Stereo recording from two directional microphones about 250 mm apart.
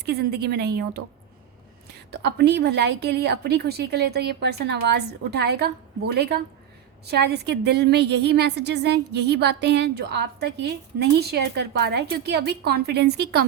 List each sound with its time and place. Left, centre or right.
0.0 s a woman's voice: right
2.0 s a woman's voice: right